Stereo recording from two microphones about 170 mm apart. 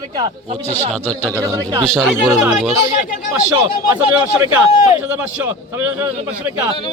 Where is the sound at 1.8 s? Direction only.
5° left (ahead or behind).